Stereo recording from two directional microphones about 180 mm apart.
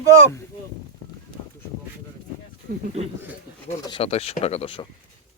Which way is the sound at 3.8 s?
30° left (ahead or behind).